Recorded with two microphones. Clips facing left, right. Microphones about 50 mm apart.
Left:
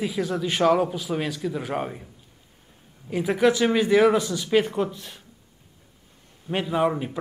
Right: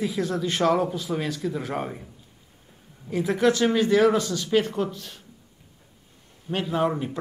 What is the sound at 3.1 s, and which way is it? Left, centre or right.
A man's voice, centre.